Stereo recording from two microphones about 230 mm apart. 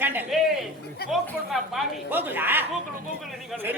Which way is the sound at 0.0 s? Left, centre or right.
Centre.